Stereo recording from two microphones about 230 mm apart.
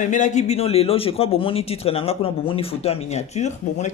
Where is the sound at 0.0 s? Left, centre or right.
Left.